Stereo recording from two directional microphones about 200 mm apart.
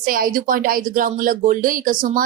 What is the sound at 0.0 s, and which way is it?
A woman's voice, 45° right (ahead or behind).